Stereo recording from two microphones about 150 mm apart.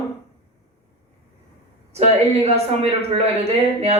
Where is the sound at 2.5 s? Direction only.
45° right (ahead or behind).